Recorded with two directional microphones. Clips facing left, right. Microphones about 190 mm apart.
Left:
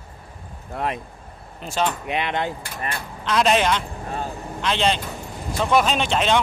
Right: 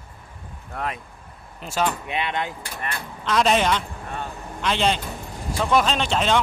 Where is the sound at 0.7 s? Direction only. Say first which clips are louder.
Left 3 dB; 35° left (ahead or behind).